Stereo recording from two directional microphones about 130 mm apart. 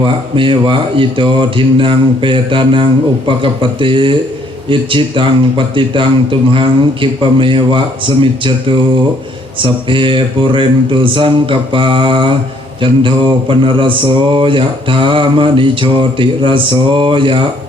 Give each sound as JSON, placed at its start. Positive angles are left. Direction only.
{"t": 0.0, "sound": "mantra", "side_deg": -40}